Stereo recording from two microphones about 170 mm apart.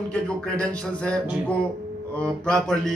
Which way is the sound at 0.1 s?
5° left (ahead or behind).